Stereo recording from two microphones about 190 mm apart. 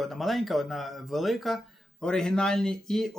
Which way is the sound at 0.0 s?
Centre (ahead or behind).